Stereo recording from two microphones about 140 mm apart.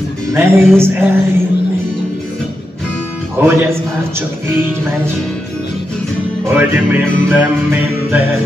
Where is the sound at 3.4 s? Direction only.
15° right (ahead or behind).